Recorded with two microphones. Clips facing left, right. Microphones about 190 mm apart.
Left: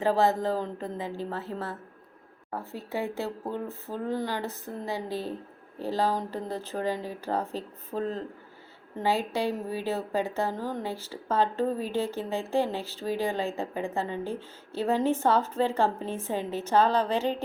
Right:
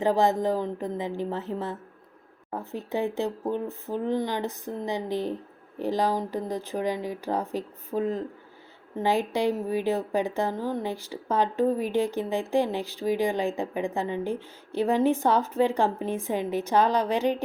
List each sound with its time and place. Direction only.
0.0 s speech: 15° right (ahead or behind)